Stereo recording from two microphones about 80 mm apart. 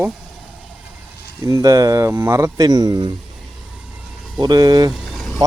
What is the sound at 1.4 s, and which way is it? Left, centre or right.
Speech, right.